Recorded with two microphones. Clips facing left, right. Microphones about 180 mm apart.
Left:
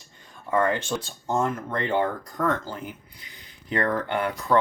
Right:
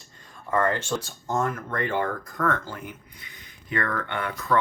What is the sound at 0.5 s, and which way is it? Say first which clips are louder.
Speech: left 1 dB; 15° left (ahead or behind).